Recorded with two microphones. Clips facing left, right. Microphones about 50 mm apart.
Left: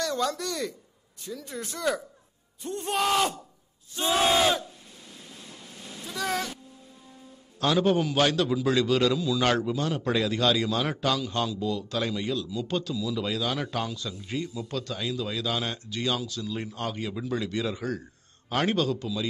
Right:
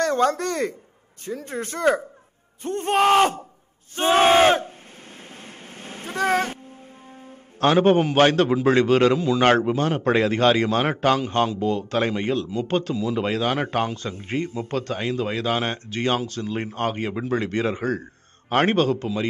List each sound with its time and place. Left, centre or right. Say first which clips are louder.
0.0 s speech: right 8 dB; right
5.3 s a sound: right 4 dB; right
7.2 s a man's voice: right 7 dB; right